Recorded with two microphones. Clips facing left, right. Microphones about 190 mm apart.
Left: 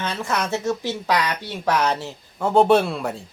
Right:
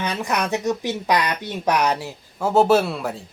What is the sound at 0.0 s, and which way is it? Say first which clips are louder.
Speech: right 1 dB; 15° right (ahead or behind).